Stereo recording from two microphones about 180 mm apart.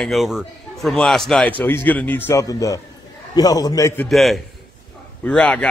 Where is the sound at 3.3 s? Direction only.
20° left (ahead or behind).